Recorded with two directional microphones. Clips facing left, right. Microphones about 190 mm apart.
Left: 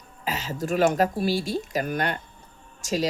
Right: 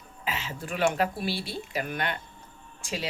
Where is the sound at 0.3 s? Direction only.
40° left (ahead or behind).